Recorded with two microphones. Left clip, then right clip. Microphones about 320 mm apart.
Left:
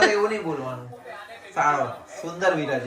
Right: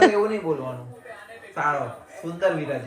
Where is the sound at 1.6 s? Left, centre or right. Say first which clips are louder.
Left 3 dB; centre.